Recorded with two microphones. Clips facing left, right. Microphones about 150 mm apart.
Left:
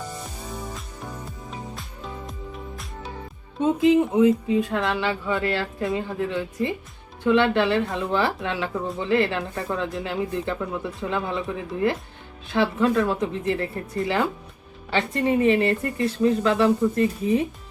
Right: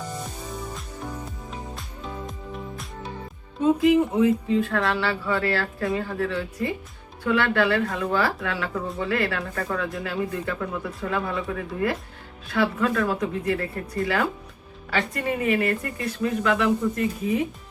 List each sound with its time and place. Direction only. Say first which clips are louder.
0.7 s music: right 2 dB; centre (ahead or behind)
3.6 s speech: even; 20° left (ahead or behind)